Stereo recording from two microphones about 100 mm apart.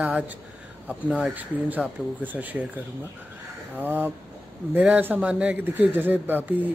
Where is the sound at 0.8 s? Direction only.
10° right (ahead or behind).